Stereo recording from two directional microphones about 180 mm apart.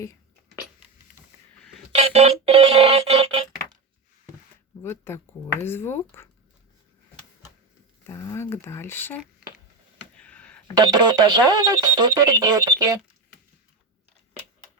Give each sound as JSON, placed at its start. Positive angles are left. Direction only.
{"t": 1.9, "sound": "music", "side_deg": -35}
{"t": 4.8, "sound": "speech", "side_deg": 15}
{"t": 8.0, "sound": "speech", "side_deg": 15}
{"t": 10.2, "sound": "a sound", "side_deg": 5}
{"t": 10.8, "sound": "speech", "side_deg": -25}